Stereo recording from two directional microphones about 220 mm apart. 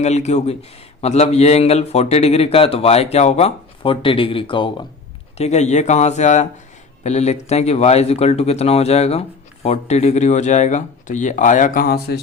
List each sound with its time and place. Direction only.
0.0 s a man's voice: 30° left (ahead or behind)